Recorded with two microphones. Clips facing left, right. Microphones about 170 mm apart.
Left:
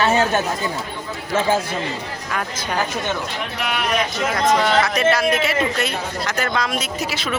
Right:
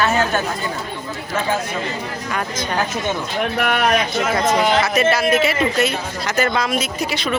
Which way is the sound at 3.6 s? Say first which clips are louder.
Right 5 dB; 55° right (ahead or behind).